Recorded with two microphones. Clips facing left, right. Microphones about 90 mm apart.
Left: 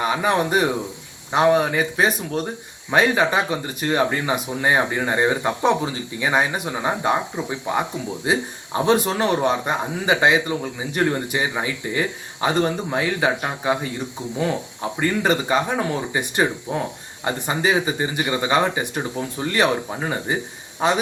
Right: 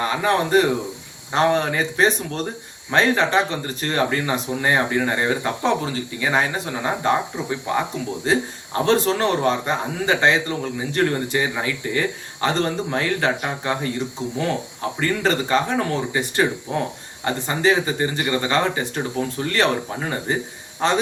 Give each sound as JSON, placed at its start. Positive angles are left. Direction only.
{"t": 0.0, "sound": "speech", "side_deg": 15}